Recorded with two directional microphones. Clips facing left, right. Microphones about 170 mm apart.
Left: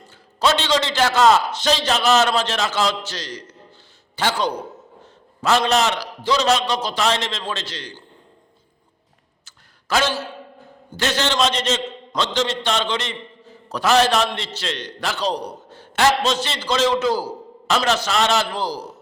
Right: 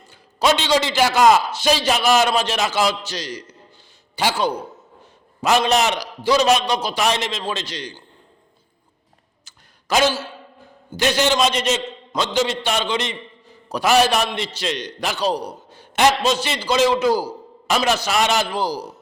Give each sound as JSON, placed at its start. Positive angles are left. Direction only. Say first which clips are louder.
{"t": 0.3, "sound": "a man's voice", "louder": "right 1 dB", "side_deg": -15}
{"t": 9.9, "sound": "a man's voice", "louder": "right 3 dB", "side_deg": -15}